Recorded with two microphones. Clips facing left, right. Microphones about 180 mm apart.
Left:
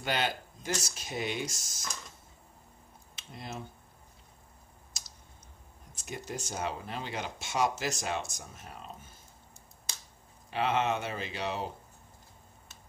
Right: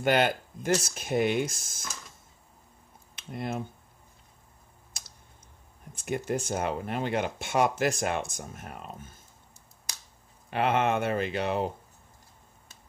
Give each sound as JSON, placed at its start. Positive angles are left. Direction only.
{"t": 0.0, "sound": "speech", "side_deg": -55}
{"t": 3.2, "sound": "speech", "side_deg": -55}
{"t": 5.9, "sound": "speech", "side_deg": -55}
{"t": 10.5, "sound": "speech", "side_deg": -55}